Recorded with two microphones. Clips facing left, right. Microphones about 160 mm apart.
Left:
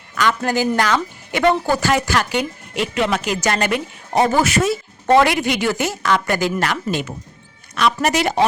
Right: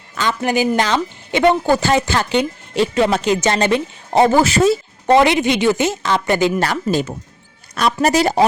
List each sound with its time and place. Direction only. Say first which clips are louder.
0.2 s a woman's voice: right 1 dB; 20° right (ahead or behind)
6.7 s speech: right 4 dB; 35° right (ahead or behind)